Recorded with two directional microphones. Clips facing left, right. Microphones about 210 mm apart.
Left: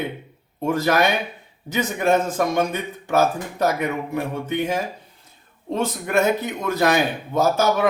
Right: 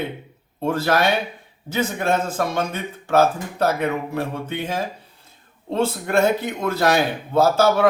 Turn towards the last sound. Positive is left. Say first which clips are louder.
# right 2 dB
turn(degrees=15)  # may be behind; listen again after turning